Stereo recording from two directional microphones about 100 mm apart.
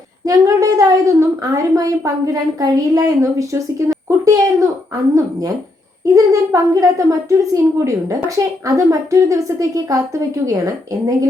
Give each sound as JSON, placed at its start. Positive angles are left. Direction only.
{"t": 0.3, "sound": "a woman's voice", "side_deg": -35}
{"t": 6.1, "sound": "a woman's voice", "side_deg": -35}